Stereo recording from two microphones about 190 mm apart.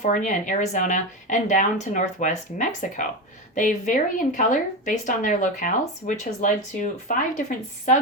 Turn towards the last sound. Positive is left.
turn(degrees=40)  # may be behind; listen again after turning